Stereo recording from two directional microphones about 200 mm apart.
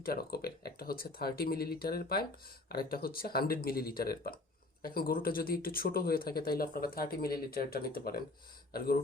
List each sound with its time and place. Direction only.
0.0 s speech: 50° left (ahead or behind)